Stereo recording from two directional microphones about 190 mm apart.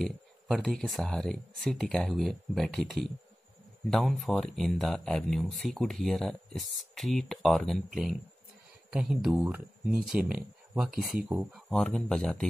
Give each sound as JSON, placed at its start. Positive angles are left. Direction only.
{"t": 0.0, "sound": "speech", "side_deg": 0}